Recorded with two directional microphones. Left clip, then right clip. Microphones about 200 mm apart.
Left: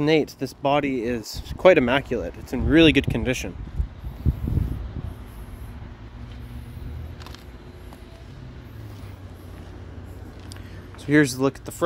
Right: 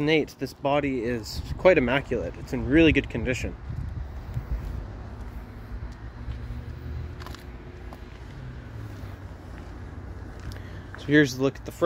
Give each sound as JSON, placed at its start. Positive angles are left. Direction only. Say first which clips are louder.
{"t": 0.0, "sound": "speech", "louder": "left 3 dB", "side_deg": 25}
{"t": 11.1, "sound": "speech", "louder": "left 2 dB", "side_deg": 25}